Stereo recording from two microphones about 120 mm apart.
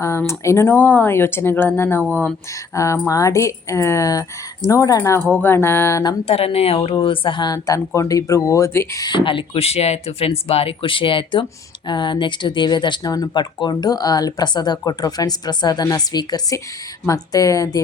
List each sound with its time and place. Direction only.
0.0 s speech: 25° left (ahead or behind)
6.2 s a woman's voice: 55° left (ahead or behind); by 9.0 s 25° left (ahead or behind)
9.0 s speech: 45° left (ahead or behind); by 17.7 s 30° left (ahead or behind)